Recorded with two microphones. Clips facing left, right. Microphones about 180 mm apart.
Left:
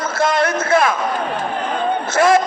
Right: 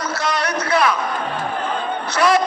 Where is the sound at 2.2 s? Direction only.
50° left (ahead or behind).